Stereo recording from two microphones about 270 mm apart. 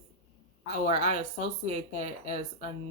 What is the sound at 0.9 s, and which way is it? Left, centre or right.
Speech, centre.